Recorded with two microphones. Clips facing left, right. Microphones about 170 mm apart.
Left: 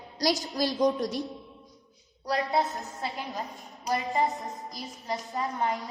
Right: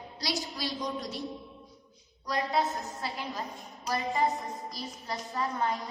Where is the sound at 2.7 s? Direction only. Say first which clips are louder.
Right 1 dB; centre (ahead or behind).